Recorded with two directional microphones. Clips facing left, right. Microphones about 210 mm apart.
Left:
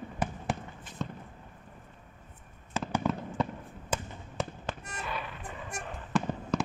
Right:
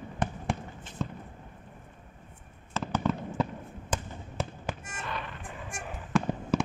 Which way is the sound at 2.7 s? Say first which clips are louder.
Right 1 dB; 15° left (ahead or behind).